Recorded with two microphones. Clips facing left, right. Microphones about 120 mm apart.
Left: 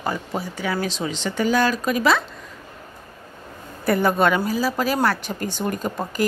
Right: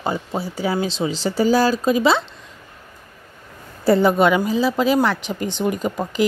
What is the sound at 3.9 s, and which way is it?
A woman's voice, 20° right (ahead or behind).